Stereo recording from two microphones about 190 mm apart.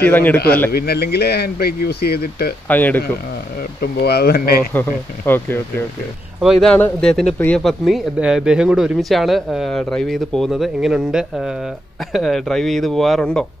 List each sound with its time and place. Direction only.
0.0 s speech: 10° left (ahead or behind)
0.7 s speech: 55° left (ahead or behind)
2.7 s speech: 10° left (ahead or behind)
3.8 s speech: 55° left (ahead or behind)
4.7 s speech: 10° left (ahead or behind)
6.4 s speech: centre (ahead or behind)